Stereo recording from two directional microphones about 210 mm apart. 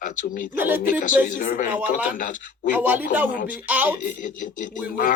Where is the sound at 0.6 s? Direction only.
10° right (ahead or behind).